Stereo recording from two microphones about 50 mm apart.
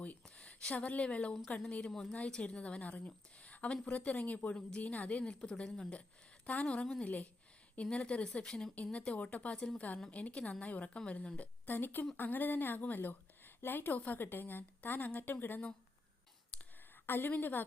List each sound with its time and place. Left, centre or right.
0.3 s a woman's voice: left
1.9 s a woman's voice: centre
2.1 s a woman's voice: left
5.9 s a woman's voice: left
9.5 s a woman's voice: centre
11.3 s a woman's voice: left
17.1 s a woman's voice: left